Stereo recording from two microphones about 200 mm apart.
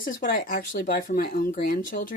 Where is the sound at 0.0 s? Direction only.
45° left (ahead or behind).